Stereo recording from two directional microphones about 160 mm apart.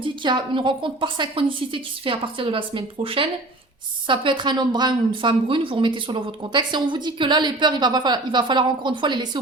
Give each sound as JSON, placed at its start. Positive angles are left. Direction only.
{"t": 0.0, "sound": "a woman's voice", "side_deg": -30}